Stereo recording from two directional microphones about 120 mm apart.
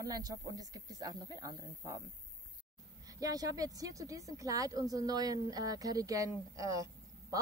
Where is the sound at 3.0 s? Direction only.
30° right (ahead or behind).